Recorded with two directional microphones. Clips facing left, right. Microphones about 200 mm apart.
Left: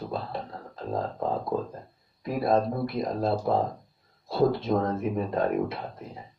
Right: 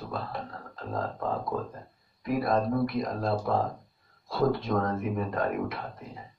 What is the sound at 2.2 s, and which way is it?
Speech, 30° left (ahead or behind).